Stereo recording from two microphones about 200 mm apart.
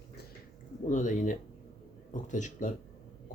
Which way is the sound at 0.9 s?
40° left (ahead or behind).